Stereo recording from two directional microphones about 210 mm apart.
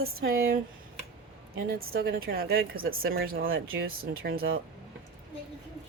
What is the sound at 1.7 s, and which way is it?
Speech, 45° right (ahead or behind).